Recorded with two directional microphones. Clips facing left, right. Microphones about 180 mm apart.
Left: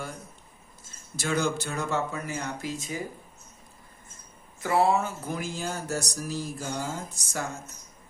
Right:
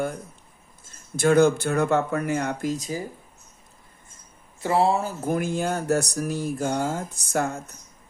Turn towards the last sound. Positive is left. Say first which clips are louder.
# right 8 dB
turn(degrees=-55)  # may be behind; listen again after turning